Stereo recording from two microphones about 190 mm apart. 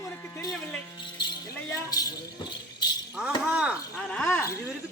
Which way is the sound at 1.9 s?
20° left (ahead or behind).